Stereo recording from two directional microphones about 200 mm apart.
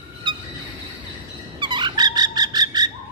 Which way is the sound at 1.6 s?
20° right (ahead or behind).